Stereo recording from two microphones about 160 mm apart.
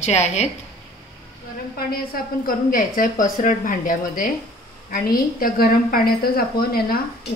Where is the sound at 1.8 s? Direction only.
65° left (ahead or behind).